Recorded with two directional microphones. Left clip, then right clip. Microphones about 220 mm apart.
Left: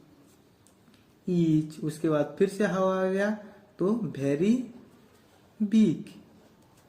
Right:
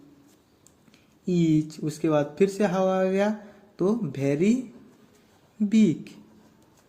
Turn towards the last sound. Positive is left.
turn(degrees=-40)  # may be behind; listen again after turning